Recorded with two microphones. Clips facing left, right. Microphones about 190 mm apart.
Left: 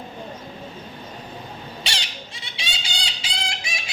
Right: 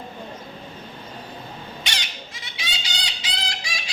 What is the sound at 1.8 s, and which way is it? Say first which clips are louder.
Bird: left 1 dB; 30° left (ahead or behind).